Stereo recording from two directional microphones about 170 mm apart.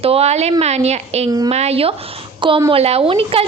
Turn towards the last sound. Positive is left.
turn(degrees=-35)  # may be behind; listen again after turning